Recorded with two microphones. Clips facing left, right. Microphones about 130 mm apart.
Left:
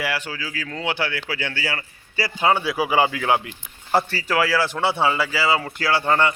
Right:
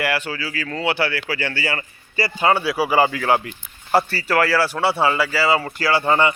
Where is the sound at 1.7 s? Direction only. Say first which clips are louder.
Right 3 dB; 10° left (ahead or behind).